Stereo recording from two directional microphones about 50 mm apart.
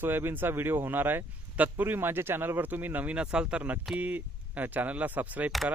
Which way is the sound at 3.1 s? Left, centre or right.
Right.